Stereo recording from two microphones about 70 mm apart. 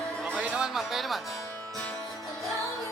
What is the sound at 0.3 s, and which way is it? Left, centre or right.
Music, centre.